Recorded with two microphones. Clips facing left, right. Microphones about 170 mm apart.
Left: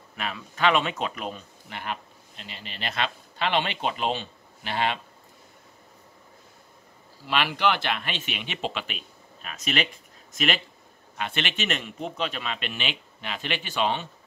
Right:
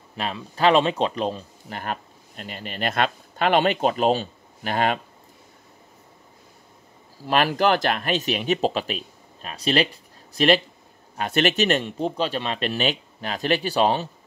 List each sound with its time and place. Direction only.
0.1 s speech: 30° right (ahead or behind)
7.2 s a man's voice: 40° right (ahead or behind)